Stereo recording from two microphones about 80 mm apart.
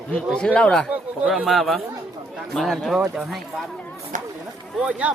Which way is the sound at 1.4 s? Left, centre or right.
Centre.